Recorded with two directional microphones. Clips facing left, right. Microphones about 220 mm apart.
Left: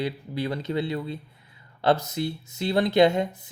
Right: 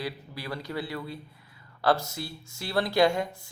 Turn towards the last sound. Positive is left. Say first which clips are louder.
# left 4 dB
turn(degrees=20)  # may be behind; listen again after turning